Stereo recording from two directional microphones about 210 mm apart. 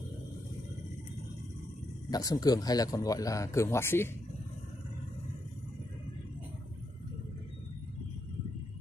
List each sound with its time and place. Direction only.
2.0 s speech: 15° left (ahead or behind)